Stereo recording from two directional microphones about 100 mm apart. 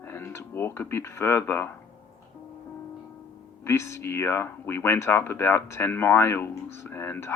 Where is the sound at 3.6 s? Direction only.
30° left (ahead or behind).